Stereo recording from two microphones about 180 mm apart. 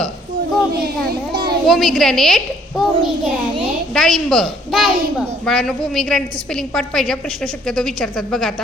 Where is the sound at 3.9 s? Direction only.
Centre (ahead or behind).